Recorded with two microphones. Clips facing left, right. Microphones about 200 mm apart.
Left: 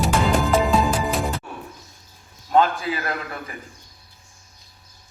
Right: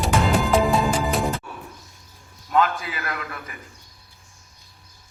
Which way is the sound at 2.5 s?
30° left (ahead or behind).